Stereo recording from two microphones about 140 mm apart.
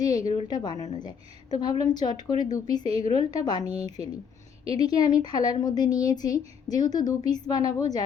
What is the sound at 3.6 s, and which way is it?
Speech, 45° right (ahead or behind).